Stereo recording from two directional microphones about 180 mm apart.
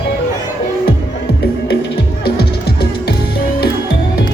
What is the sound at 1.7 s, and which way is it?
Music, 65° left (ahead or behind).